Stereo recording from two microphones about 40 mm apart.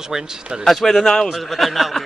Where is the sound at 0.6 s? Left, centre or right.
Centre.